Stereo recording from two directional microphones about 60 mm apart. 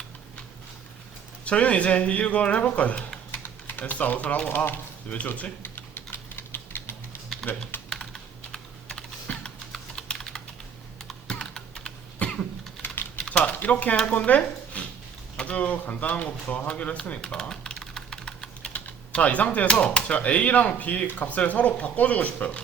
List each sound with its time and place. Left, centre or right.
1.5 s speech: left
5.0 s typing: left
7.9 s computer keyboard: centre
9.4 s typing: centre
12.2 s typing: left
14.1 s speech: left
17.5 s typing: centre
18.7 s speech: left